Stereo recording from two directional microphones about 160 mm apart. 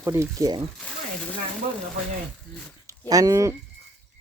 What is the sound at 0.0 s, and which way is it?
Speech, 15° right (ahead or behind).